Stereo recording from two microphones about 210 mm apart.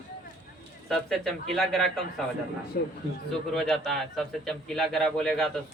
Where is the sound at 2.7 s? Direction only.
45° left (ahead or behind).